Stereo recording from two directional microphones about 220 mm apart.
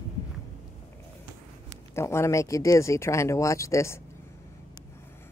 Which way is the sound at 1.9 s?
10° left (ahead or behind).